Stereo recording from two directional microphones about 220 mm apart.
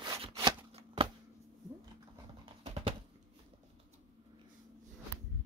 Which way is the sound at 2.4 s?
25° right (ahead or behind).